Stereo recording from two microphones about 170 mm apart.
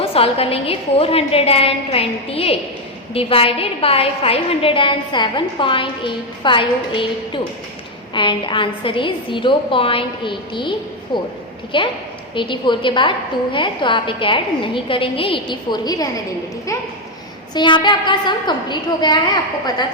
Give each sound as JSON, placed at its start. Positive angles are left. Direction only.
{"t": 0.0, "sound": "a woman's voice", "side_deg": 35}
{"t": 17.5, "sound": "a woman's voice", "side_deg": 25}